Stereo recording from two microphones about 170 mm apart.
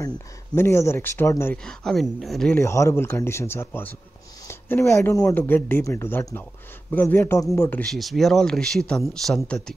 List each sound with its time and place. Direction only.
0.6 s speech: 15° left (ahead or behind)
2.6 s speech: 15° left (ahead or behind)